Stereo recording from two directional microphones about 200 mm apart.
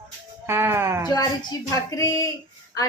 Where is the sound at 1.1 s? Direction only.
20° left (ahead or behind).